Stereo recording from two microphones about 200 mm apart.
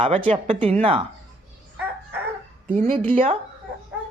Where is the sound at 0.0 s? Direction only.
25° right (ahead or behind).